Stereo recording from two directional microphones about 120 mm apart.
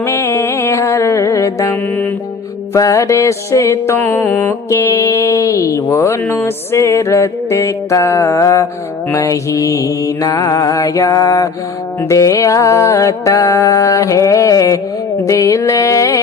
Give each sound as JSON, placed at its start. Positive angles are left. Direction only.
{"t": 0.0, "sound": "music", "side_deg": 20}